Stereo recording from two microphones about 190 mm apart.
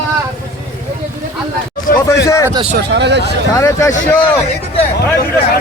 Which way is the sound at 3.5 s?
15° left (ahead or behind).